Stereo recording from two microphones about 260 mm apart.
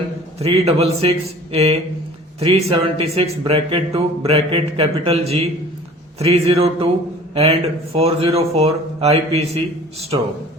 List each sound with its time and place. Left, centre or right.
0.3 s speech: right